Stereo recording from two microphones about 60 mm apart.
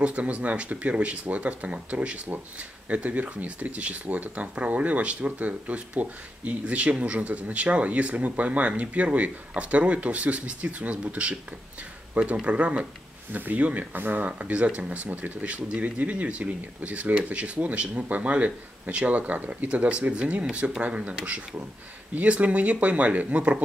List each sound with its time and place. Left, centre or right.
0.0 s speech: right
12.4 s speech: right